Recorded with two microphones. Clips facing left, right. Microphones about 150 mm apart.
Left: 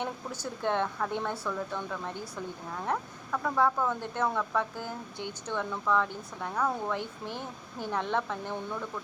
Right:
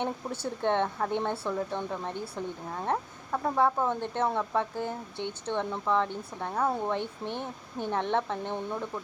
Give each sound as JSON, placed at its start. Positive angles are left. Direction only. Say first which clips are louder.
{"t": 0.0, "sound": "speech", "louder": "right 3 dB", "side_deg": -25}